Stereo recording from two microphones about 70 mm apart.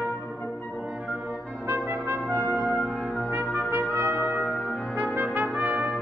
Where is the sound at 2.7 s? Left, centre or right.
Centre.